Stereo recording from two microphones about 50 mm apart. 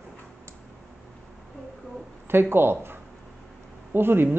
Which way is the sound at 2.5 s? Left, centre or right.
Right.